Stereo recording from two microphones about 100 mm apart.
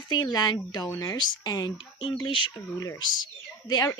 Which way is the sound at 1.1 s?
45° left (ahead or behind).